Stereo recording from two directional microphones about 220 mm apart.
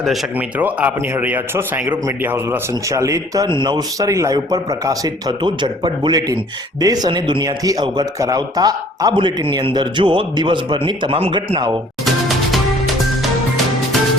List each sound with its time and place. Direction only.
0.0 s speech: 5° right (ahead or behind); by 11.8 s 20° right (ahead or behind)